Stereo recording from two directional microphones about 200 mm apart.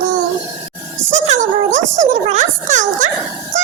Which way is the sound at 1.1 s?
35° right (ahead or behind).